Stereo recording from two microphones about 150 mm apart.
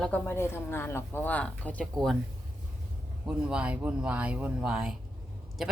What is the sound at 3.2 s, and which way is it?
Speech, 5° right (ahead or behind).